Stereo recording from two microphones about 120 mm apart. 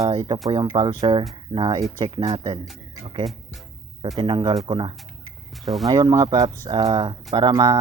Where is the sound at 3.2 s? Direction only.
Centre (ahead or behind).